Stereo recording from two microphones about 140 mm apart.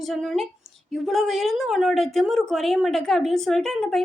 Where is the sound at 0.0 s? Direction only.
Centre (ahead or behind).